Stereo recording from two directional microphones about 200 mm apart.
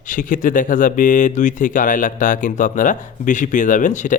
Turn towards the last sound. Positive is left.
turn(degrees=40)  # may be behind; listen again after turning